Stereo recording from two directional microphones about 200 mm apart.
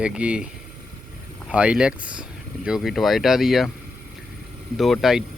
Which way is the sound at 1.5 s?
5° right (ahead or behind).